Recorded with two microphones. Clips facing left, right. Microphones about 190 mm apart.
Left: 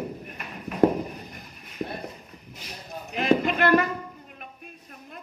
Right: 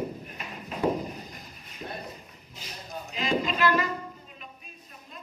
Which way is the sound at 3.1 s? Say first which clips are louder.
Left 6 dB; 60° left (ahead or behind).